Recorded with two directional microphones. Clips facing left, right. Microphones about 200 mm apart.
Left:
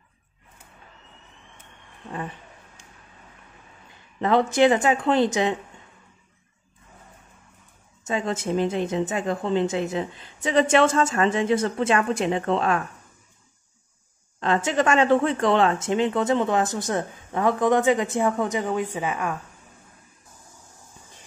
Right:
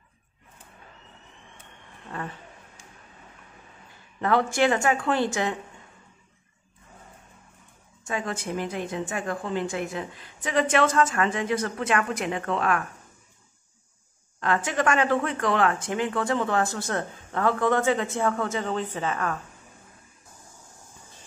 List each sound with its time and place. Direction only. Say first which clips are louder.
2.0 s speech: left 2 dB; 15° left (ahead or behind)
4.2 s a woman's voice: left 4 dB; 20° left (ahead or behind)
8.0 s a woman's voice: left 4 dB; 25° left (ahead or behind)
14.4 s speech: left 3 dB; 25° left (ahead or behind)